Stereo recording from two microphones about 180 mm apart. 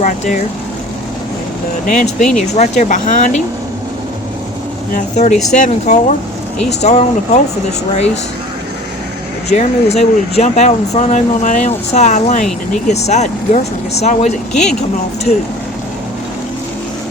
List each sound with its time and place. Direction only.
0.0 s speech: 45° left (ahead or behind)
1.9 s speech: 40° left (ahead or behind)
4.9 s speech: 40° left (ahead or behind)
9.5 s speech: 35° left (ahead or behind)